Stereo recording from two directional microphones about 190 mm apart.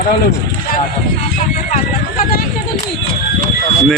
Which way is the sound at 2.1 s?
50° left (ahead or behind).